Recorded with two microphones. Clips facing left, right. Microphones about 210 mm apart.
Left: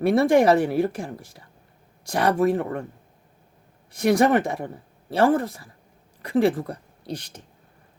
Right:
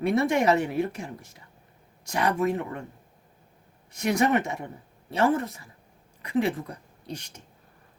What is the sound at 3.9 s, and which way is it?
Speech, 35° left (ahead or behind).